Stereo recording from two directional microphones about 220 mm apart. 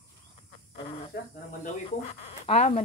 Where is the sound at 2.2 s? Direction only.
30° left (ahead or behind).